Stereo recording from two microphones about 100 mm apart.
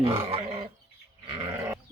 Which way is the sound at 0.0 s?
70° right (ahead or behind).